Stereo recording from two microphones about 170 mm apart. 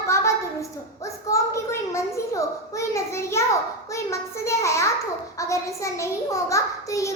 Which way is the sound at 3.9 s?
15° left (ahead or behind).